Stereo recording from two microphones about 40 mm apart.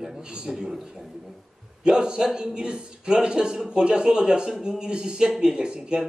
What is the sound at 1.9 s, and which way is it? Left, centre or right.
A man's voice, centre.